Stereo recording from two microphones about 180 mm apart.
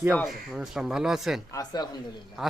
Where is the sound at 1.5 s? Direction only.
20° left (ahead or behind).